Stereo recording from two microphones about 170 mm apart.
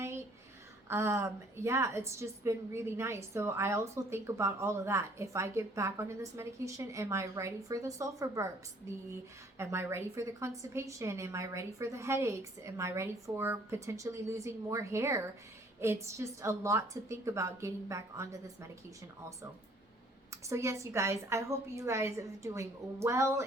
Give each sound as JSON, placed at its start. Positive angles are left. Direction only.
{"t": 0.9, "sound": "a woman's voice", "side_deg": -15}
{"t": 9.6, "sound": "a woman's voice", "side_deg": -15}
{"t": 20.3, "sound": "a woman's voice", "side_deg": -15}